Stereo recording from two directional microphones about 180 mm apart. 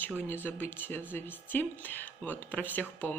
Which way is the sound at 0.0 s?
10° left (ahead or behind).